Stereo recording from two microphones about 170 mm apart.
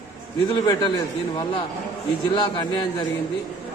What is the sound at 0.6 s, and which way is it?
Speech, 25° left (ahead or behind).